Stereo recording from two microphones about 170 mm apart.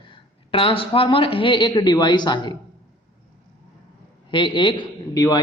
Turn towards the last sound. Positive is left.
turn(degrees=20)  # may be behind; listen again after turning